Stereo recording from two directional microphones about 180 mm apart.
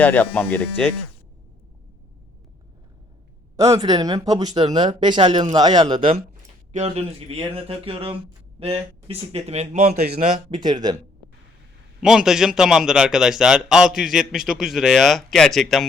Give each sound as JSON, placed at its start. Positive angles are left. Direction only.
{"t": 0.0, "sound": "speech", "side_deg": 10}
{"t": 3.6, "sound": "speech", "side_deg": -20}
{"t": 6.7, "sound": "a man's voice", "side_deg": -35}
{"t": 10.5, "sound": "speech", "side_deg": -25}
{"t": 12.0, "sound": "a man's voice", "side_deg": -5}